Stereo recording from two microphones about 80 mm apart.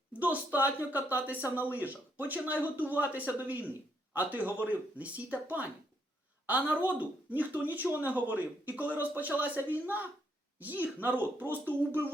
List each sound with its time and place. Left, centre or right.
0.2 s speech: right